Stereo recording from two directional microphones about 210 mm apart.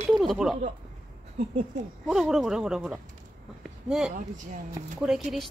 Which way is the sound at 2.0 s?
Centre (ahead or behind).